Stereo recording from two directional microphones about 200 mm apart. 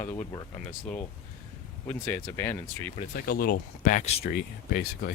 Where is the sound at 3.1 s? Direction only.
45° left (ahead or behind).